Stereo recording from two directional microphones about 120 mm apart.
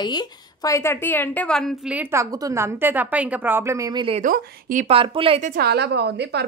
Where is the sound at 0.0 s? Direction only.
35° left (ahead or behind).